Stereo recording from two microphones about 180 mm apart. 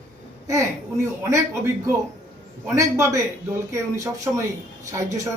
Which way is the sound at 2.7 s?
15° right (ahead or behind).